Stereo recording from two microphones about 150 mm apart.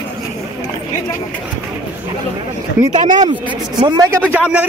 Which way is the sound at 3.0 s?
55° right (ahead or behind).